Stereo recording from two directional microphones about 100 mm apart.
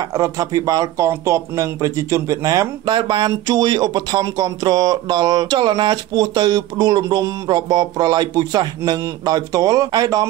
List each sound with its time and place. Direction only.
0.1 s speech: 35° right (ahead or behind)
2.9 s speech: 50° right (ahead or behind)